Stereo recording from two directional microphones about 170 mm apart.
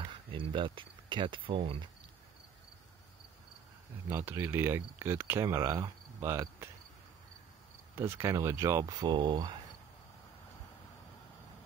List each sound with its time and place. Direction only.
0.0 s speech: 30° right (ahead or behind)
4.1 s speech: 15° right (ahead or behind)
7.9 s speech: 15° right (ahead or behind)